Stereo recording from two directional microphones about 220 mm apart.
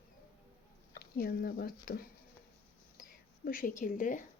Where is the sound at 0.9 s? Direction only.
45° left (ahead or behind).